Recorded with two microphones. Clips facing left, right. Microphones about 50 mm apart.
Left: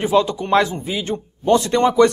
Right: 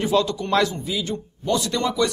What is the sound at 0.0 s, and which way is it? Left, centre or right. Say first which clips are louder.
A man's voice: left 4 dB; left.